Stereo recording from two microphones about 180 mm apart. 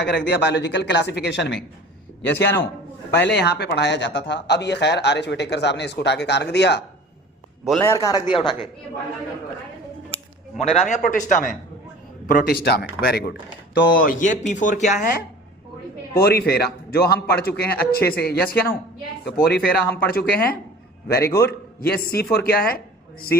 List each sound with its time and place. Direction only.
0.0 s speech: 70° left (ahead or behind)
3.2 s speech: 70° left (ahead or behind)
7.8 s a man's voice: 15° left (ahead or behind)
10.6 s a man's voice: 35° left (ahead or behind)
12.3 s speech: 55° left (ahead or behind)
14.0 s speech: 45° left (ahead or behind)
16.1 s speech: 60° left (ahead or behind)
21.2 s a man's voice: 15° left (ahead or behind)
21.8 s speech: 60° left (ahead or behind)